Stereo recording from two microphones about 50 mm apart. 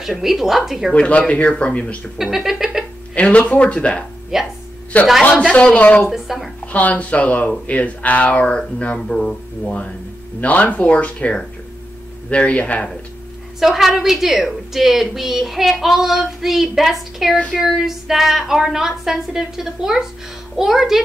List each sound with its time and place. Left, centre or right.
0.2 s a woman's voice: centre
0.9 s speech: left
2.3 s a woman's voice: centre
3.2 s speech: left
4.3 s a child's voice: centre
4.9 s a man's voice: left
6.1 s speech: centre
6.6 s speech: left
13.6 s a woman's voice: centre